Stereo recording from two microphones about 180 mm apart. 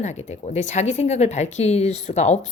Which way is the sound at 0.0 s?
40° left (ahead or behind).